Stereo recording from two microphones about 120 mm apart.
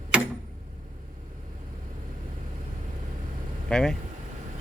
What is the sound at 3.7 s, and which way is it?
Speech, 5° left (ahead or behind).